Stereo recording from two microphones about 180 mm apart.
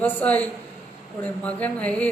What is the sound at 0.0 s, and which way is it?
A man's voice, 10° left (ahead or behind).